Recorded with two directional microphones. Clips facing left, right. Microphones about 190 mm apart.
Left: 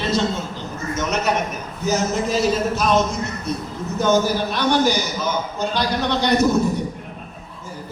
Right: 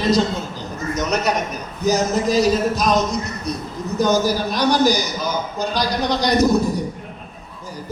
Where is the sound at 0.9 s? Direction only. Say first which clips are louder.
Right 1 dB; 35° right (ahead or behind).